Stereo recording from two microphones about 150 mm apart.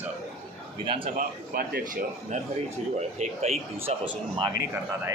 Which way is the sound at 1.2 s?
75° right (ahead or behind).